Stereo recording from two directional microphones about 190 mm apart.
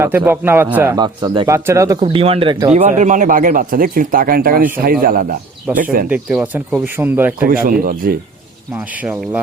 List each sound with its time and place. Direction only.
0.0 s speech: 10° right (ahead or behind)
2.0 s speech: 30° right (ahead or behind)
2.7 s speech: 40° right (ahead or behind)
6.1 s speech: 5° right (ahead or behind)
7.4 s speech: 50° right (ahead or behind)